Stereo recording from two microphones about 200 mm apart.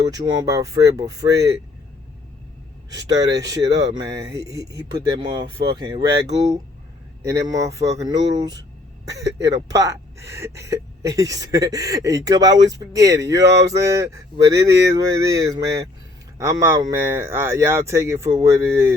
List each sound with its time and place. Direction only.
0.6 s speech: 15° right (ahead or behind)
2.9 s speech: 20° right (ahead or behind)